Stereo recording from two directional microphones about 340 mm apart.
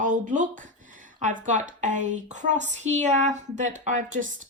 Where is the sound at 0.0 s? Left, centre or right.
Right.